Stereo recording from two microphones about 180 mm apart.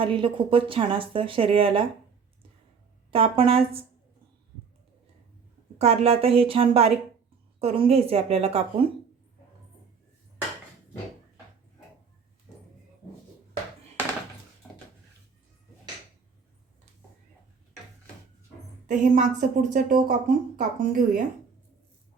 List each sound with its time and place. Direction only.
0.0 s speech: 30° right (ahead or behind)
3.1 s a woman's voice: 30° right (ahead or behind)
5.8 s a woman's voice: 35° right (ahead or behind)
18.9 s a woman's voice: 45° right (ahead or behind)